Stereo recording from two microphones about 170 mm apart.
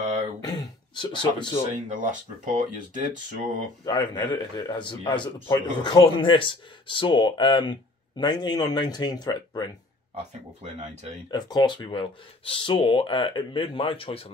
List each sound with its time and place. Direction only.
0.0 s throat clearing: 45° right (ahead or behind)
0.4 s throat clearing: 25° left (ahead or behind)
1.9 s speech: 50° right (ahead or behind)
3.8 s speech: 25° left (ahead or behind)
10.6 s speech: 40° right (ahead or behind)
11.2 s speech: 25° left (ahead or behind)